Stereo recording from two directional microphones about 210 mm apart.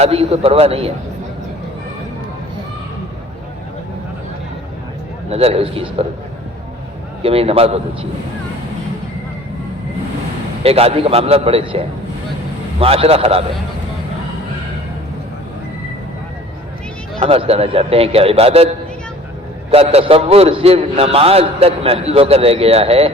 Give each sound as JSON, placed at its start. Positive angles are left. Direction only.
{"t": 0.0, "sound": "a man's voice", "side_deg": -30}
{"t": 5.3, "sound": "a man's voice", "side_deg": -30}
{"t": 7.2, "sound": "a man's voice", "side_deg": -30}
{"t": 10.6, "sound": "a man's voice", "side_deg": -30}
{"t": 12.8, "sound": "a man's voice", "side_deg": -30}
{"t": 17.2, "sound": "a man's voice", "side_deg": -30}
{"t": 19.7, "sound": "a man's voice", "side_deg": -30}